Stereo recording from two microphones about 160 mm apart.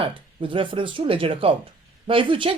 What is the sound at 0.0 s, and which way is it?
Speech, 35° right (ahead or behind).